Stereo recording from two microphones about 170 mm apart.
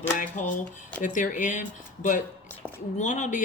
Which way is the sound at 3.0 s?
45° left (ahead or behind).